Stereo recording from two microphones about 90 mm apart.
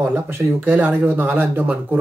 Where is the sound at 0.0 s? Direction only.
25° right (ahead or behind).